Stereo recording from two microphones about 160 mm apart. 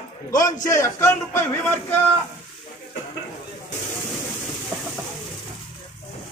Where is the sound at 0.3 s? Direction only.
20° left (ahead or behind).